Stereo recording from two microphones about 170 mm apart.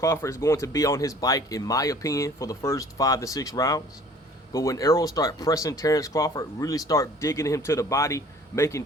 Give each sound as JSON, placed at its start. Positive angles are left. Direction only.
{"t": 0.0, "sound": "speech", "side_deg": 15}